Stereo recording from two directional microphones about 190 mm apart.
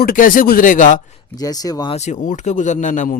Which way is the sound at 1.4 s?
20° left (ahead or behind).